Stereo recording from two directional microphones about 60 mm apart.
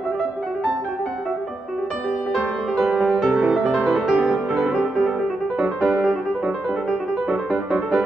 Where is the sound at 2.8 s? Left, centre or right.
Centre.